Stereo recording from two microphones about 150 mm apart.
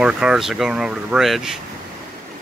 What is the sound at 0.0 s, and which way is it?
Speech, 5° right (ahead or behind).